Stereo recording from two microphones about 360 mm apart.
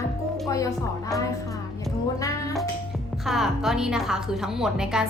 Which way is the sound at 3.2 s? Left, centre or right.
Centre.